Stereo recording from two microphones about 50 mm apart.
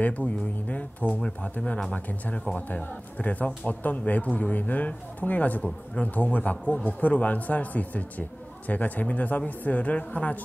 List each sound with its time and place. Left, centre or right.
0.0 s speech: left